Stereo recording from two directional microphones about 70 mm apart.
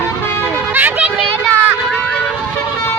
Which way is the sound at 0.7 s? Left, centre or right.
Right.